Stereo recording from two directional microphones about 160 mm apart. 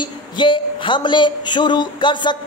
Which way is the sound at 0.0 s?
30° left (ahead or behind).